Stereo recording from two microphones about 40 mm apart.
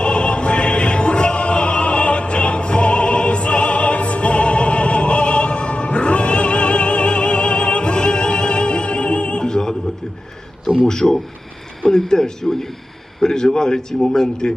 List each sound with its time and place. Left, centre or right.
0.0 s music: left
10.8 s a man's voice: centre